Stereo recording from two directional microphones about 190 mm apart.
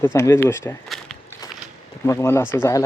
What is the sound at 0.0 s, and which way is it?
Speech, 15° left (ahead or behind).